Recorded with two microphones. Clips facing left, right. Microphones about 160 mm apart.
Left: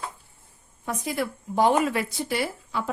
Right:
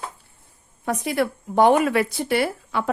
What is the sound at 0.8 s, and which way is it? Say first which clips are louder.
Speech: right 6 dB; 70° right (ahead or behind).